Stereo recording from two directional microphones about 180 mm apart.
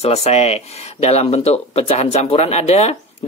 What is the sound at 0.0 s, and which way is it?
Speech, 35° left (ahead or behind).